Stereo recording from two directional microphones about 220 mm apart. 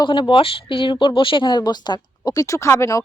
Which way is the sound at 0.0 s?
20° left (ahead or behind).